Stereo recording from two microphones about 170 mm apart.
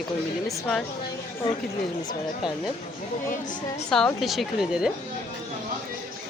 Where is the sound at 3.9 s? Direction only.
5° left (ahead or behind).